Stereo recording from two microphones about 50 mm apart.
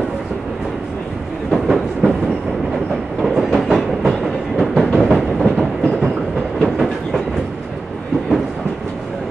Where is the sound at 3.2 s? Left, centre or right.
Centre.